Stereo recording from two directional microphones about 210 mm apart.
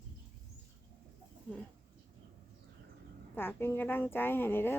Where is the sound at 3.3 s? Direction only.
10° left (ahead or behind).